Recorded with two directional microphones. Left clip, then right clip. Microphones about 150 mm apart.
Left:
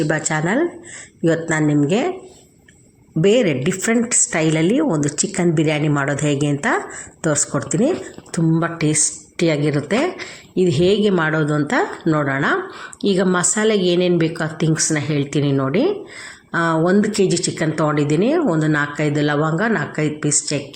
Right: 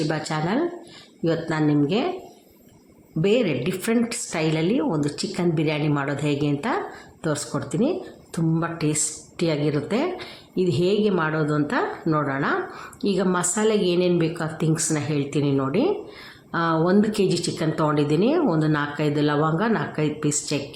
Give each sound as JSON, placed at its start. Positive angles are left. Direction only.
{"t": 0.3, "sound": "a woman's voice", "side_deg": 20}
{"t": 3.2, "sound": "a woman's voice", "side_deg": 20}
{"t": 9.4, "sound": "a woman's voice", "side_deg": 20}